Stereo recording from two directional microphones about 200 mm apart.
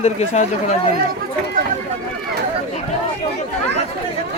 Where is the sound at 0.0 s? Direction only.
35° left (ahead or behind).